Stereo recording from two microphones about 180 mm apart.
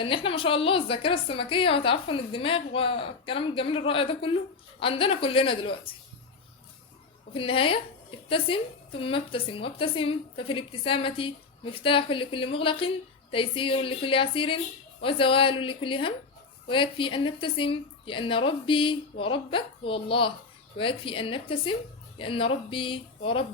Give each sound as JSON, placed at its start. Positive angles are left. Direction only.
{"t": 0.0, "sound": "a woman's voice", "side_deg": 30}
{"t": 7.3, "sound": "a woman's voice", "side_deg": 30}